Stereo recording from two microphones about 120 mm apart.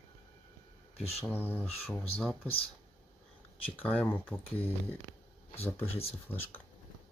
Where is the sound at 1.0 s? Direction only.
60° left (ahead or behind).